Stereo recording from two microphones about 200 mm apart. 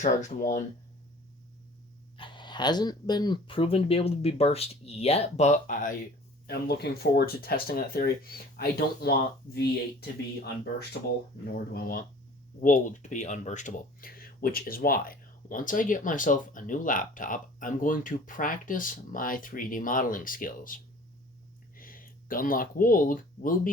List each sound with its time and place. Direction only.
0.0 s speech: 40° left (ahead or behind)
2.1 s speech: 25° left (ahead or behind); by 5.9 s 40° left (ahead or behind)
6.5 s speech: 50° left (ahead or behind)
11.5 s speech: 50° left (ahead or behind)